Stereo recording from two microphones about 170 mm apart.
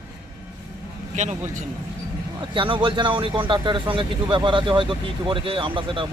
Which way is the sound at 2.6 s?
30° right (ahead or behind).